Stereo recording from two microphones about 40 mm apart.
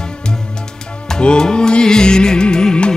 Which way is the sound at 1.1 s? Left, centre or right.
Centre.